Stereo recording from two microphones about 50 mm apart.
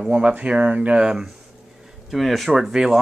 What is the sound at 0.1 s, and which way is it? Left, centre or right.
Speech, right.